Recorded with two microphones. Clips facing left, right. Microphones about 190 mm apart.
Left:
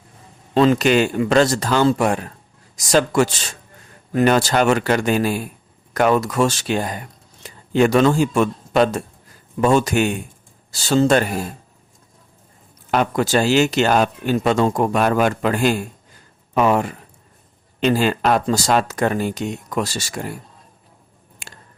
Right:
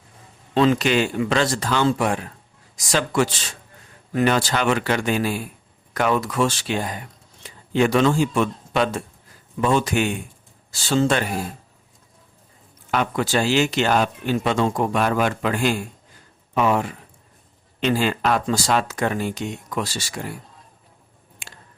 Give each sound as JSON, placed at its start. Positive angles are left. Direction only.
{"t": 0.5, "sound": "speech", "side_deg": 40}
{"t": 12.9, "sound": "speech", "side_deg": 40}